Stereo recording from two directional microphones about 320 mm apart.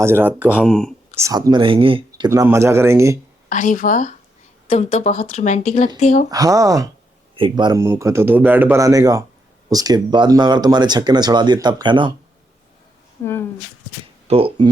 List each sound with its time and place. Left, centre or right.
0.0 s speech: centre
1.2 s speech: centre
3.5 s speech: left
6.3 s speech: centre
13.2 s a woman's voice: centre
14.3 s speech: centre